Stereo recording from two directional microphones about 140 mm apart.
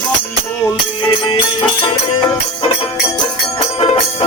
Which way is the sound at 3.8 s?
40° left (ahead or behind).